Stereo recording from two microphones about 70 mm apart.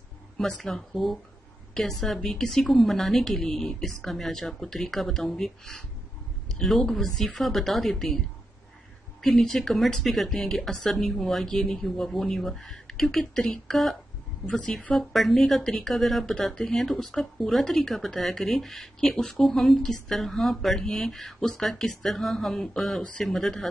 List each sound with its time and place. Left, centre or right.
0.4 s a woman's voice: centre
9.2 s speech: centre
14.4 s a woman's voice: centre
15.0 s speech: centre